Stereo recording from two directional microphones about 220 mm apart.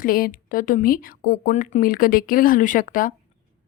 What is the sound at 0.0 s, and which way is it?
A woman's voice, 40° left (ahead or behind).